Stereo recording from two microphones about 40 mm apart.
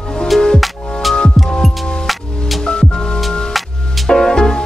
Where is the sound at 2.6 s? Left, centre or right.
Centre.